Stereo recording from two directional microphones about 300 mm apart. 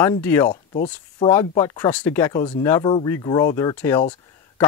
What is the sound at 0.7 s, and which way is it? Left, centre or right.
Speech, left.